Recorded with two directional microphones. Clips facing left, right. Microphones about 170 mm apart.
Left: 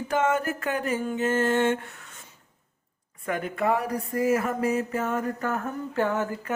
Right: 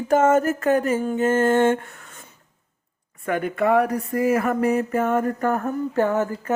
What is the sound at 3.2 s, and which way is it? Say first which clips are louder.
Speech: right 5 dB; 60° right (ahead or behind).